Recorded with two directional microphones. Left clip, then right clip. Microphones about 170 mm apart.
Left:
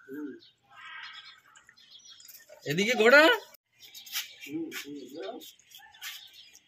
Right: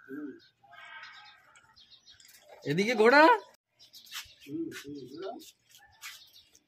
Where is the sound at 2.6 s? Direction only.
85° right.